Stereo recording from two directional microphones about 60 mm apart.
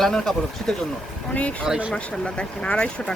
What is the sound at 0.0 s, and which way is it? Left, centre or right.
Speech, centre.